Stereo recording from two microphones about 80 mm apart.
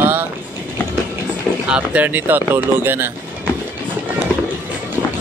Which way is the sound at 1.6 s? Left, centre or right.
Centre.